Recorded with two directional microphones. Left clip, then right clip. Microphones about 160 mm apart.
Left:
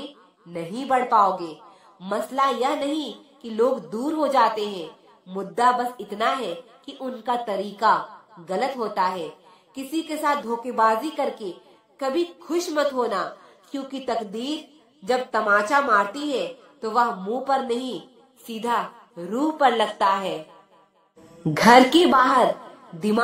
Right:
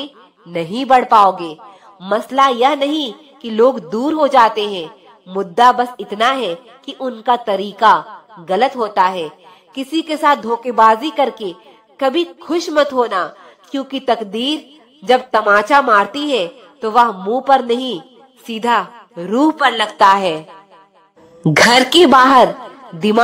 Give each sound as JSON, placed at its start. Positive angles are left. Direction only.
{"t": 0.5, "sound": "a woman's voice", "side_deg": -40}
{"t": 21.8, "sound": "a woman's voice", "side_deg": -40}